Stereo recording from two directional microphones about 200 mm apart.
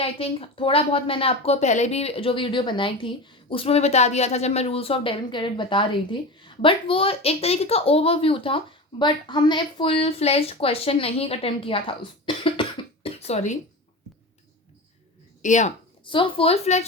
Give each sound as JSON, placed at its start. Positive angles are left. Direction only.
{"t": 0.0, "sound": "a woman's voice", "side_deg": 30}
{"t": 15.4, "sound": "speech", "side_deg": 40}
{"t": 16.0, "sound": "a woman's voice", "side_deg": 25}